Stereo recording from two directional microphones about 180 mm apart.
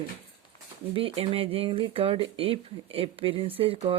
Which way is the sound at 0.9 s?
30° right (ahead or behind).